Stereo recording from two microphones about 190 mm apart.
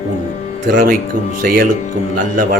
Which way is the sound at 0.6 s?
45° right (ahead or behind).